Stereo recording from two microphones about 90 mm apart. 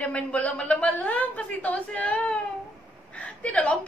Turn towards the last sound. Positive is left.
turn(degrees=15)  # may be behind; listen again after turning